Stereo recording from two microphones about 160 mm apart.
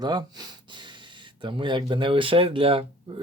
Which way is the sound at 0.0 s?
25° right (ahead or behind).